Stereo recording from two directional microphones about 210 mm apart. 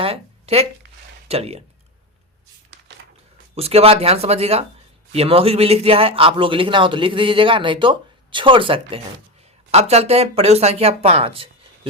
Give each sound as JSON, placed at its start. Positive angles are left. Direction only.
{"t": 0.0, "sound": "a sound", "side_deg": -30}
{"t": 1.3, "sound": "a man's voice", "side_deg": -30}
{"t": 3.5, "sound": "a man's voice", "side_deg": -30}